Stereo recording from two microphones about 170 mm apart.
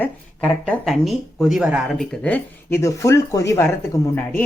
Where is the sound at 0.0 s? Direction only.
5° left (ahead or behind).